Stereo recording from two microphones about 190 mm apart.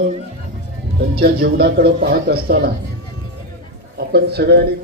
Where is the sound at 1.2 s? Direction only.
55° right (ahead or behind).